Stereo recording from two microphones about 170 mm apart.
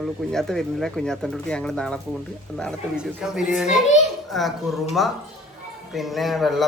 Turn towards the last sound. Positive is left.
turn(degrees=0)  # may be behind; listen again after turning